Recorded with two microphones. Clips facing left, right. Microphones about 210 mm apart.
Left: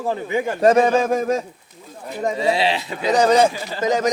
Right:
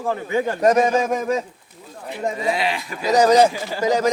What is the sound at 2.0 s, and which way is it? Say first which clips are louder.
Speech: left 3 dB; 40° left (ahead or behind).